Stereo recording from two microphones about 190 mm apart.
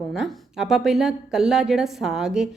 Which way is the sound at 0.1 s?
Centre (ahead or behind).